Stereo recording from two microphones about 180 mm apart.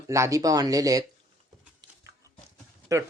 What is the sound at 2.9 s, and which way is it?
Speech, 15° right (ahead or behind).